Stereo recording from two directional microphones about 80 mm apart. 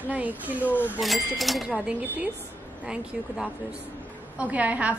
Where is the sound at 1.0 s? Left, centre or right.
Centre.